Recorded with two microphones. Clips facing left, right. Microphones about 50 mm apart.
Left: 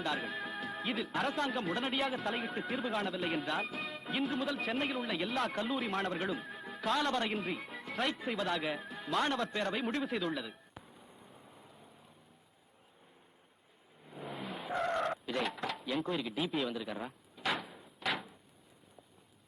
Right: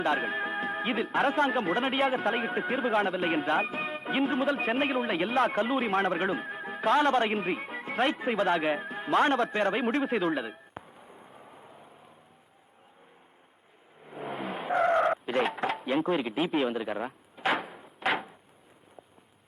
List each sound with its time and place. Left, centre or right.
0.0 s speech: right
11.5 s rain: right
14.0 s vehicle: right
14.8 s speech: right
17.1 s door: right
18.0 s a sound: right